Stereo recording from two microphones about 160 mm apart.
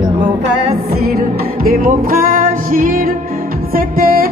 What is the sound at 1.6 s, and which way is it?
Music, 65° right (ahead or behind).